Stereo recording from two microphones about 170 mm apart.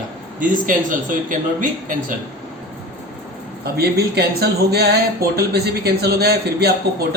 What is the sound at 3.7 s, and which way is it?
A man's voice, 70° right (ahead or behind).